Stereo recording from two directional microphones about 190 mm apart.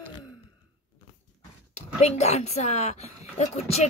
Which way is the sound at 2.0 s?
35° left (ahead or behind).